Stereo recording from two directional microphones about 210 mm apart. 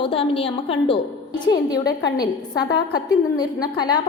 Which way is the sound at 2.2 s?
20° left (ahead or behind).